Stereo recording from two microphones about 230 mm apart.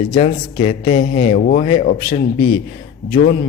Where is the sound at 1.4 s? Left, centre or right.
Left.